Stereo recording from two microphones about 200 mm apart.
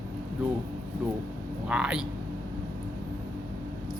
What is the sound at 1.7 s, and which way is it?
Speech, 5° right (ahead or behind).